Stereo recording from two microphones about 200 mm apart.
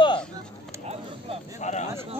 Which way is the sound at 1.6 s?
35° left (ahead or behind).